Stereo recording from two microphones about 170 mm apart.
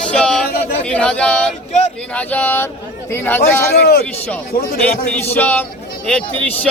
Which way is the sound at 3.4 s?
65° left (ahead or behind).